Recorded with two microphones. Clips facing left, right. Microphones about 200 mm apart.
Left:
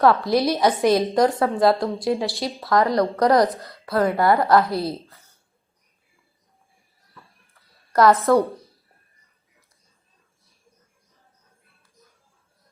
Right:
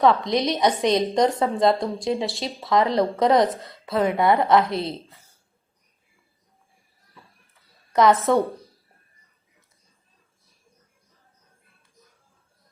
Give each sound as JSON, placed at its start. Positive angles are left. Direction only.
{"t": 0.0, "sound": "a woman's voice", "side_deg": 0}
{"t": 4.5, "sound": "a woman's voice", "side_deg": -20}
{"t": 4.9, "sound": "a woman's voice", "side_deg": 0}
{"t": 7.9, "sound": "a woman's voice", "side_deg": 0}